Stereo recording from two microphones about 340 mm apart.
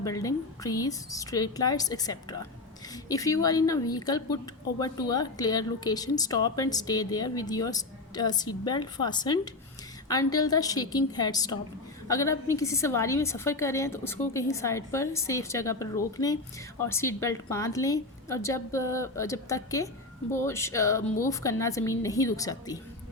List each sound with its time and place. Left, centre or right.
0.0 s speech: centre